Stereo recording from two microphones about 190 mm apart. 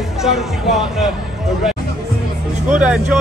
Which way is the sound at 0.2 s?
Centre (ahead or behind).